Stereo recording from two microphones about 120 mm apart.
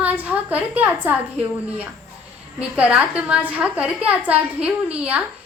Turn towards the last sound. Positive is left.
turn(degrees=-10)  # may be behind; listen again after turning